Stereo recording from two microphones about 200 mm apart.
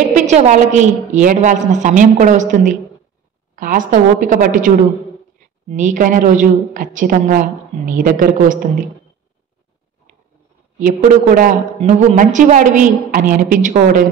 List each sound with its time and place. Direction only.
0.1 s a woman's voice: 35° right (ahead or behind)
10.8 s a woman's voice: 40° right (ahead or behind)